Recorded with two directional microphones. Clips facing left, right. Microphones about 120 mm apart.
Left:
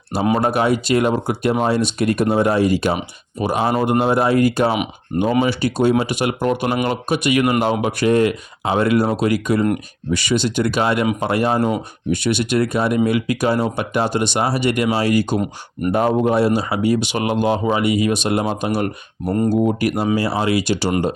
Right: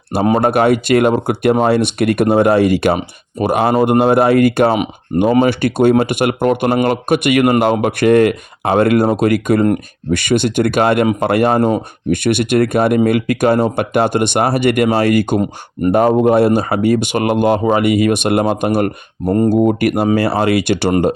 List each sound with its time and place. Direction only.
0.3 s speech: 60° right (ahead or behind)